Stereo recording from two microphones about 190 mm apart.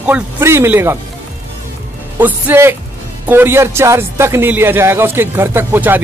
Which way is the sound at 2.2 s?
10° right (ahead or behind).